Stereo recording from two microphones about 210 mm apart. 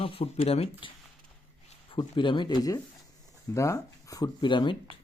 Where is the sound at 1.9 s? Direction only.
25° left (ahead or behind).